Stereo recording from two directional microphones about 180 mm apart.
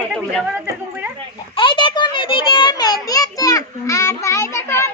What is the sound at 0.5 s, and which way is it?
Chatter, 10° right (ahead or behind).